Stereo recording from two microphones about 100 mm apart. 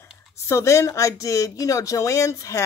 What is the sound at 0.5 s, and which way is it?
Speech, 30° left (ahead or behind).